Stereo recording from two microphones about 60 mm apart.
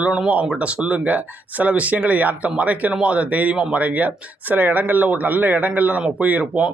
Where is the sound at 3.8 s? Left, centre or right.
Right.